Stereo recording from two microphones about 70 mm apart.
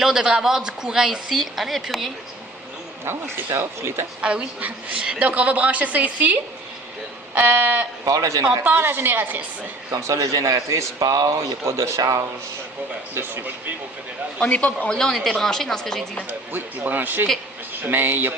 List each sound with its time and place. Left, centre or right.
0.0 s a woman's voice: centre
3.0 s speech: right
4.2 s a woman's voice: centre
8.0 s speech: right
8.6 s speech: right
9.9 s a man's voice: right
11.6 s a man's voice: right
13.1 s a woman's voice: right
14.4 s a man's voice: centre
14.9 s a woman's voice: centre
16.5 s a woman's voice: right